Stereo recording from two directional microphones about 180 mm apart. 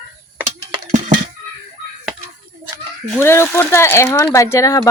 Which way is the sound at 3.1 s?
15° left (ahead or behind).